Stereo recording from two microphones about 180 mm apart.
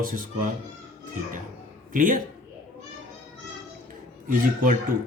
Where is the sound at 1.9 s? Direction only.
50° right (ahead or behind).